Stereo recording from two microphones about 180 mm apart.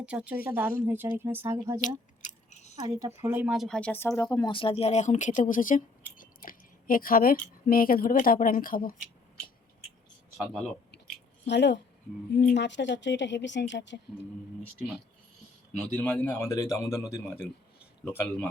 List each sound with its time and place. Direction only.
0.0 s speech: 5° right (ahead or behind)
2.2 s scissors: 40° left (ahead or behind)
2.8 s speech: 15° right (ahead or behind); by 9.0 s 50° left (ahead or behind)
10.3 s speech: centre (ahead or behind)
11.4 s a woman's voice: 75° left (ahead or behind)
16.0 s speech: 10° left (ahead or behind)
18.1 s speech: 15° left (ahead or behind)